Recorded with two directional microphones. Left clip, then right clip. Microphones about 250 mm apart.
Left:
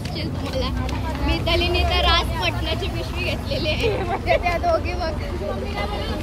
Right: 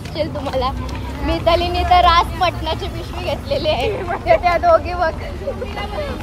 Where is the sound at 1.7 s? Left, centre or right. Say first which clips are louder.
Right 9 dB; centre.